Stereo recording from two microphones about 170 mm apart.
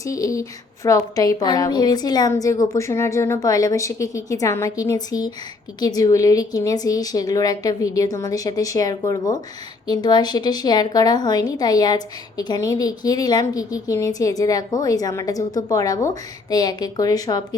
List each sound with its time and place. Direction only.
0.0 s a woman's voice: 20° left (ahead or behind)